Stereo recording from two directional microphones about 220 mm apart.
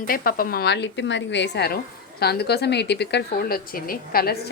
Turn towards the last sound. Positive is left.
turn(degrees=40)  # may be behind; listen again after turning